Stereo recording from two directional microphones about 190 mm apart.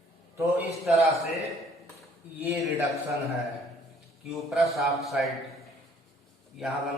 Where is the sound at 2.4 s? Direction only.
15° right (ahead or behind).